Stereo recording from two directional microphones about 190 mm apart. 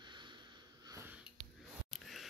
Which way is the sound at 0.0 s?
25° right (ahead or behind).